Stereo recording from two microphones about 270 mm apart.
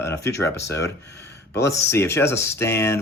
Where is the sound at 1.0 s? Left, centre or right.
Left.